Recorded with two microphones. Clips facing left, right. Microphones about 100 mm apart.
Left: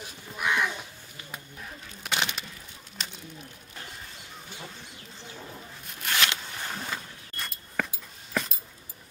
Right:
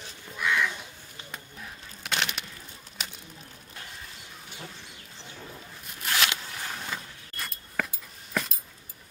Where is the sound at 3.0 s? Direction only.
5° right (ahead or behind).